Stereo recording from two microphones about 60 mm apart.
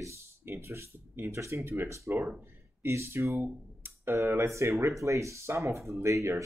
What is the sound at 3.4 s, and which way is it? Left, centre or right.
Music, right.